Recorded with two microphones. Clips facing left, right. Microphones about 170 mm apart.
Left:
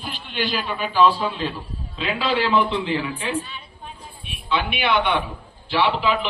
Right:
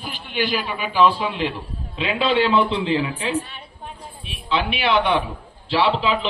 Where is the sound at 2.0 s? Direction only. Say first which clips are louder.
Right 3 dB; 25° right (ahead or behind).